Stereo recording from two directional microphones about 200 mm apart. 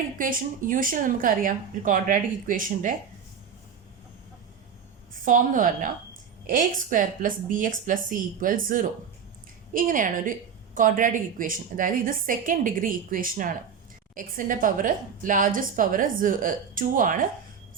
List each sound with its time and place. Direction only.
0.2 s a woman's voice: 45° right (ahead or behind)
5.2 s a woman's voice: 40° right (ahead or behind)